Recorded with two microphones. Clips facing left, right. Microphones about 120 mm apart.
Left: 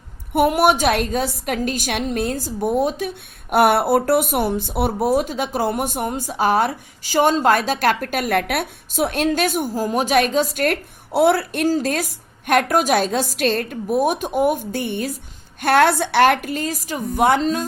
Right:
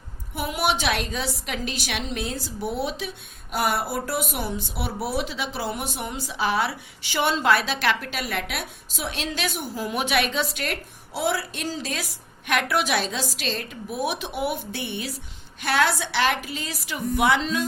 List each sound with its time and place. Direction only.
0.3 s a woman's voice: 55° left (ahead or behind)